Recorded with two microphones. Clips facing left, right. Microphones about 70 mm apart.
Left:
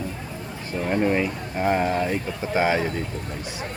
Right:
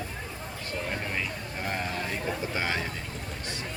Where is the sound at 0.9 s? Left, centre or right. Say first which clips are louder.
Left 16 dB; left.